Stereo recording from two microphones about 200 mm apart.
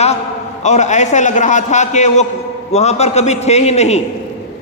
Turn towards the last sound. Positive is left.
turn(degrees=35)  # may be behind; listen again after turning